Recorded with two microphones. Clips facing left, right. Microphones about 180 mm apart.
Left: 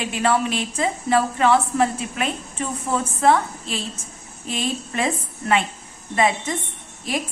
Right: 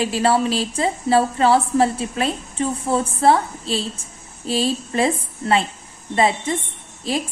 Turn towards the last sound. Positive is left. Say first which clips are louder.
# right 3 dB
turn(degrees=-30)  # may be behind; listen again after turning